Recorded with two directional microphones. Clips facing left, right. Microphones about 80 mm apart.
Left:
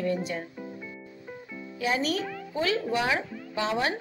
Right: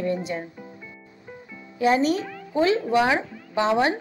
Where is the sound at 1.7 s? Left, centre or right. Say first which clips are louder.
Right 7 dB; right.